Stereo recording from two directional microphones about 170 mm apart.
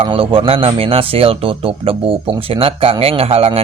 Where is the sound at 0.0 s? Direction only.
30° right (ahead or behind).